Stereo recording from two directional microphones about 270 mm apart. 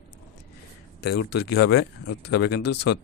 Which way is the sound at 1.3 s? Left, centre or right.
Left.